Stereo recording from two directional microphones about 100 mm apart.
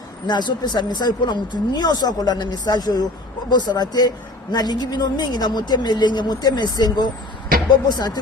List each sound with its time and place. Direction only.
0.3 s a woman's voice: 45° left (ahead or behind)